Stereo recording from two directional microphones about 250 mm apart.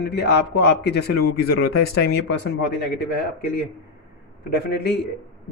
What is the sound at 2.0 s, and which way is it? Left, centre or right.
Speech, left.